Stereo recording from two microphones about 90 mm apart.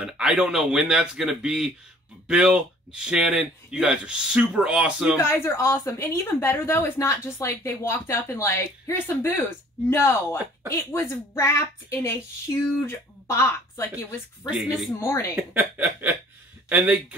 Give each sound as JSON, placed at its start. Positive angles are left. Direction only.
{"t": 0.0, "sound": "speech", "side_deg": -5}
{"t": 5.1, "sound": "a woman's voice", "side_deg": 30}
{"t": 14.9, "sound": "a woman's voice", "side_deg": 30}
{"t": 15.3, "sound": "a sound", "side_deg": -20}
{"t": 16.6, "sound": "speech", "side_deg": -15}